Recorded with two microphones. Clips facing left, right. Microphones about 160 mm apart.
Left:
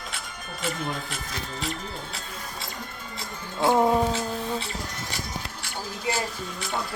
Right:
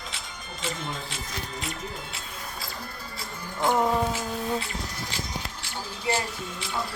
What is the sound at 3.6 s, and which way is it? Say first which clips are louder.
Music: left 3 dB; 20° left (ahead or behind).